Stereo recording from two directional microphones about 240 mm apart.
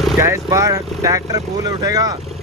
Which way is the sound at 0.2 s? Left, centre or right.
Centre.